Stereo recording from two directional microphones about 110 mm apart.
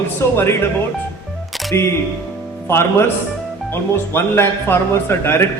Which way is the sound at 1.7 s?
25° left (ahead or behind).